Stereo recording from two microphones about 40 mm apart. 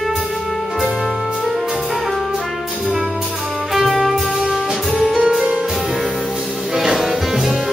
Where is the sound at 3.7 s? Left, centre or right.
Centre.